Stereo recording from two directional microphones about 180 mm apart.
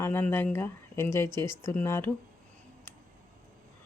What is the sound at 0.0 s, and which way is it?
Speech, 10° left (ahead or behind).